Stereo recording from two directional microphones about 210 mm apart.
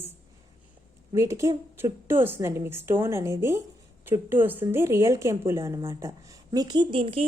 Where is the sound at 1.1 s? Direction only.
15° right (ahead or behind).